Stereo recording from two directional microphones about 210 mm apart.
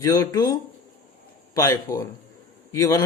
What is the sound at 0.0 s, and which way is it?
Speech, 15° left (ahead or behind).